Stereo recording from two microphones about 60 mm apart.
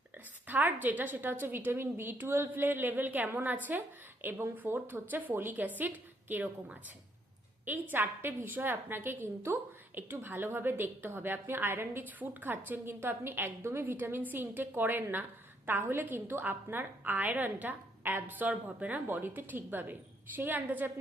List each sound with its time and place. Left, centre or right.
0.4 s a woman's voice: right
7.6 s a woman's voice: right